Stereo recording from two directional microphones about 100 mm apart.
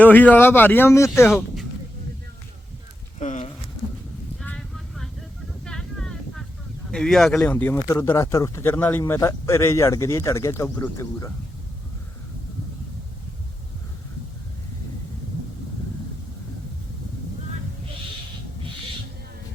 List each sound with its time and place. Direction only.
0.0 s speech: 15° left (ahead or behind)
5.6 s a sound: 5° left (ahead or behind)
6.9 s speech: 5° left (ahead or behind); by 11.3 s 30° left (ahead or behind)